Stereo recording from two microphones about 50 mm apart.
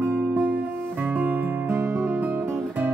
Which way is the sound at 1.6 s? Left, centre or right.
Right.